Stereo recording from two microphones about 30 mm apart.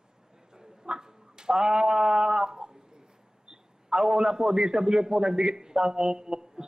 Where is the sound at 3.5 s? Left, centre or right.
Right.